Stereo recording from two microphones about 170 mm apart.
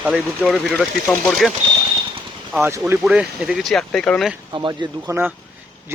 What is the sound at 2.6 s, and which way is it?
Speech, 15° right (ahead or behind).